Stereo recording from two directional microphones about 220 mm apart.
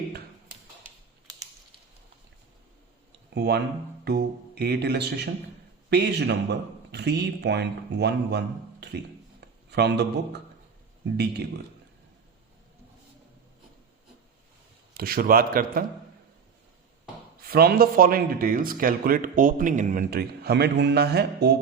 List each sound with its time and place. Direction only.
3.3 s a man's voice: 50° right (ahead or behind)
14.9 s speech: 45° right (ahead or behind)
17.4 s speech: 45° right (ahead or behind)